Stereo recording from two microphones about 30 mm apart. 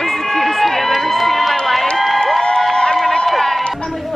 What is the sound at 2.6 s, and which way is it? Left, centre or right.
Crowd, left.